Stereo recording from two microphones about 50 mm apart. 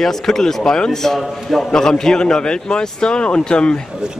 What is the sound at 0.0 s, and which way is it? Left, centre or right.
A man's voice, centre.